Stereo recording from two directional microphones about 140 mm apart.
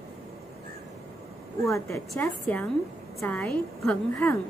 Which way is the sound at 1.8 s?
20° left (ahead or behind).